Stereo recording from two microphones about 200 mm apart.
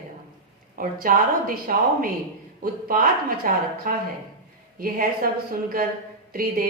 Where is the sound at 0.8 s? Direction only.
45° right (ahead or behind).